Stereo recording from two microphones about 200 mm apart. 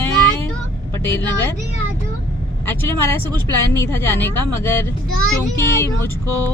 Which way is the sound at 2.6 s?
10° left (ahead or behind).